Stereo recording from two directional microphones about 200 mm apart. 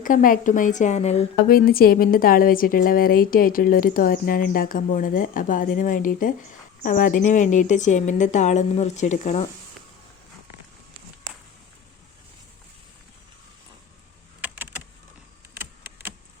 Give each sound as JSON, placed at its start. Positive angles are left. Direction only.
{"t": 0.0, "sound": "a woman's voice", "side_deg": 40}
{"t": 1.5, "sound": "a woman's voice", "side_deg": 45}